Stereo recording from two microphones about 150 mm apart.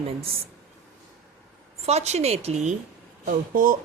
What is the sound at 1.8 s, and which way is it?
Speech, 45° right (ahead or behind).